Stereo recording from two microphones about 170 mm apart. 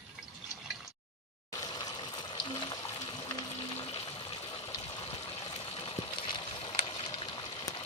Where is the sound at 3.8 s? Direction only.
35° left (ahead or behind).